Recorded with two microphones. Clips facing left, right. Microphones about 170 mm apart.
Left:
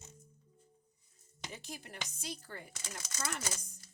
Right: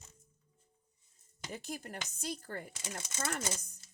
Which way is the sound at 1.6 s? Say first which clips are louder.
Right 5 dB; 45° right (ahead or behind).